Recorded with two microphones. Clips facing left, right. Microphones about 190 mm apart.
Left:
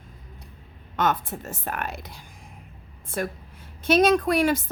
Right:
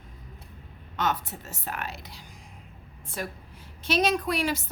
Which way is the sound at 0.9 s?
50° left (ahead or behind).